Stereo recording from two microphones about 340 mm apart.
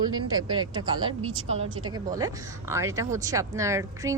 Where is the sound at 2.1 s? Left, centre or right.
Centre.